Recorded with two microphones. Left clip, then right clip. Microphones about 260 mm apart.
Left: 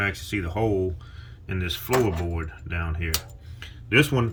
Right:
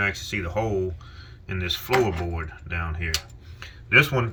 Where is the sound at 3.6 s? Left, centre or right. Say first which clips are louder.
Right 3 dB; centre.